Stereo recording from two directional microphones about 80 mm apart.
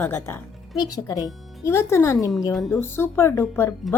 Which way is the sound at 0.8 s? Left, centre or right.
Left.